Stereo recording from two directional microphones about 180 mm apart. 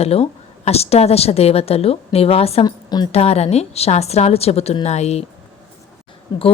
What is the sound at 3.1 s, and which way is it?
A woman's voice, 35° left (ahead or behind).